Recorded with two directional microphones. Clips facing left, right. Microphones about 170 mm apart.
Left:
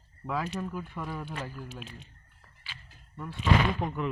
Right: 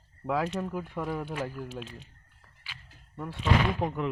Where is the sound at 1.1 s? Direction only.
55° right (ahead or behind).